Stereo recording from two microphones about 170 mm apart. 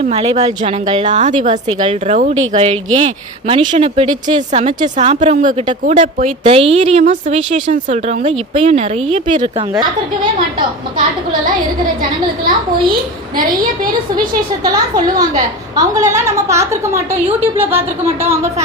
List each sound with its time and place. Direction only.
0.0 s a woman's voice: 35° right (ahead or behind)
6.4 s a woman's voice: 35° right (ahead or behind)
9.4 s a woman's voice: 25° right (ahead or behind)
14.6 s a woman's voice: 20° right (ahead or behind)